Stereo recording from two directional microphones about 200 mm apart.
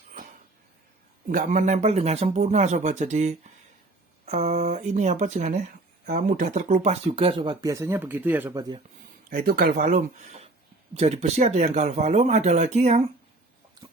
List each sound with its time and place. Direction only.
1.3 s speech: 40° right (ahead or behind); by 8.8 s 20° right (ahead or behind)
9.3 s speech: 45° right (ahead or behind)